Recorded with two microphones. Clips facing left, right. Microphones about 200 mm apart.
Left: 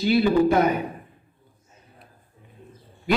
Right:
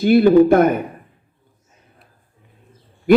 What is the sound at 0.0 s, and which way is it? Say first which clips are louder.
Speech: right 8 dB; 55° right (ahead or behind).